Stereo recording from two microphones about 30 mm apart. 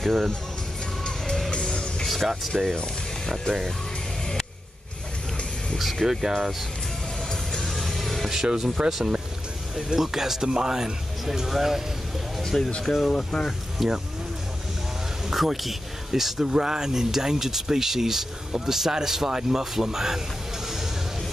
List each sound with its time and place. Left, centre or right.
0.0 s speech: centre
1.5 s music: left
2.0 s speech: centre
2.5 s speech: centre
3.5 s speech: left
6.0 s speech: centre
7.6 s music: centre
8.5 s speech: centre
12.8 s speech: centre
13.1 s speech: left
13.8 s speech: centre
15.3 s speech: centre
16.4 s speech: right
20.6 s music: centre